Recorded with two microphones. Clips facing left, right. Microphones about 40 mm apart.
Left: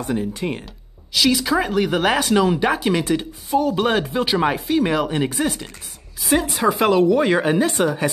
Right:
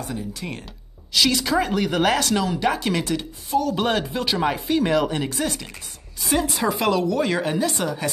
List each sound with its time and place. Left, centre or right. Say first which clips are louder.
0.0 s speech: left 7 dB; left
1.1 s a woman's voice: left 2 dB; centre
6.8 s speech: left 6 dB; left